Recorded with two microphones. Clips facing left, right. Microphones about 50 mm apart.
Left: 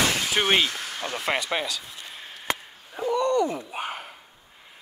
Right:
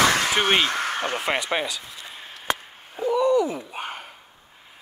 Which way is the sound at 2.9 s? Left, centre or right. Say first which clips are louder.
Right 3 dB; centre.